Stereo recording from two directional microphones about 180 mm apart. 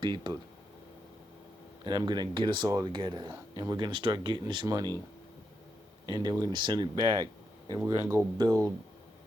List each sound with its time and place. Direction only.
0.0 s speech: 25° right (ahead or behind)
1.8 s speech: 25° right (ahead or behind)
6.1 s speech: 25° right (ahead or behind)